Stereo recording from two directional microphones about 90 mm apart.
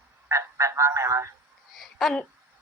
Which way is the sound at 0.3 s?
35° right (ahead or behind).